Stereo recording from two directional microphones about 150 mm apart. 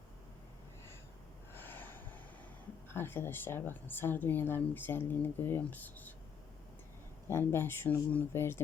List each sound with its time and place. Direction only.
1.5 s snort: 15° left (ahead or behind)
2.9 s speech: 15° left (ahead or behind)
7.3 s speech: 15° left (ahead or behind)